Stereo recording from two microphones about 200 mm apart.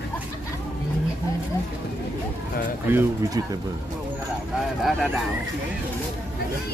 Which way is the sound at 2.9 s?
20° right (ahead or behind).